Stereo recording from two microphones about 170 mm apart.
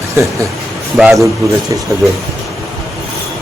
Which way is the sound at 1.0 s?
5° right (ahead or behind).